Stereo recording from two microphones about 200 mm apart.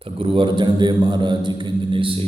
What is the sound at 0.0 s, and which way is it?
A man's voice, 25° right (ahead or behind).